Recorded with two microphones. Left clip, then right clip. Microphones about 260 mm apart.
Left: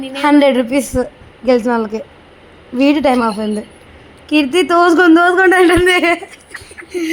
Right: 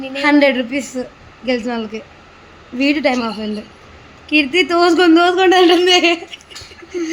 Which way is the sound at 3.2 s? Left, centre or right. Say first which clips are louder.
Left 6 dB; centre.